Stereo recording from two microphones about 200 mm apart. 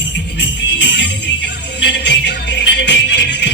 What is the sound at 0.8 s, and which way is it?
Music, 60° left (ahead or behind).